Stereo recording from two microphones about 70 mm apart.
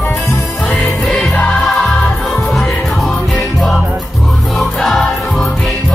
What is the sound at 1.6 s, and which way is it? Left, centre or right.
Music, centre.